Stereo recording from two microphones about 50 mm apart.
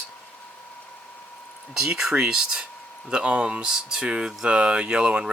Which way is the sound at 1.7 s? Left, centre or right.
Centre.